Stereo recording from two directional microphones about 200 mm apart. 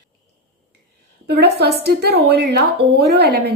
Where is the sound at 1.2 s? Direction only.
50° right (ahead or behind).